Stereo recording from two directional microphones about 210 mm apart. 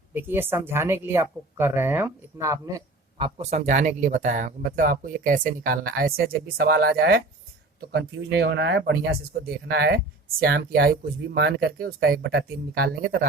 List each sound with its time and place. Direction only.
0.1 s speech: 10° right (ahead or behind); by 13.0 s 45° right (ahead or behind)